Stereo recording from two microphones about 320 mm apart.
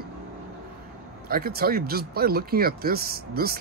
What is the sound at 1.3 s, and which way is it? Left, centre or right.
Speech, right.